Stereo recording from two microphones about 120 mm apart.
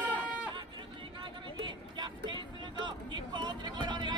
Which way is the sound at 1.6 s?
40° right (ahead or behind).